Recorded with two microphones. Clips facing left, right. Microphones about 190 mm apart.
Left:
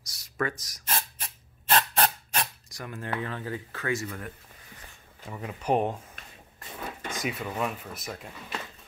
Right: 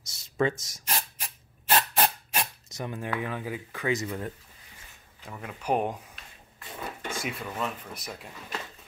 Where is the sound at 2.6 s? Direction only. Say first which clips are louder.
Right 3 dB; 20° right (ahead or behind).